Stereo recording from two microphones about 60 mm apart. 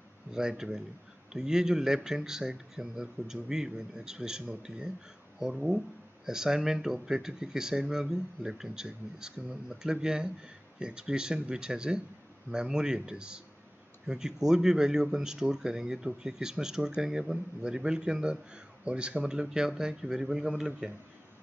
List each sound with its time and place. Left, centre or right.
0.3 s speech: centre